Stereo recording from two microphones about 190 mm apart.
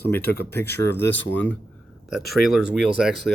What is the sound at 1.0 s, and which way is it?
Speech, 70° left (ahead or behind).